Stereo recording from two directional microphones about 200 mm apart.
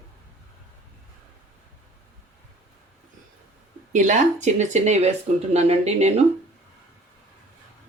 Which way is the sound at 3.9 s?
35° right (ahead or behind).